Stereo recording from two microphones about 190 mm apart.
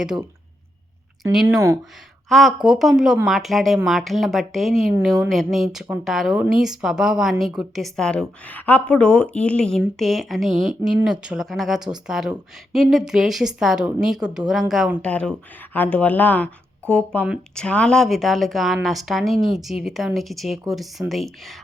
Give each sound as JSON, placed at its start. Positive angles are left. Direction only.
{"t": 1.3, "sound": "speech", "side_deg": 0}
{"t": 1.5, "sound": "speech", "side_deg": -15}
{"t": 2.6, "sound": "speech", "side_deg": 0}